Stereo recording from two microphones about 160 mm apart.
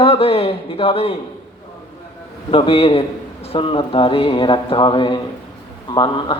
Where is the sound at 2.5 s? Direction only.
35° left (ahead or behind).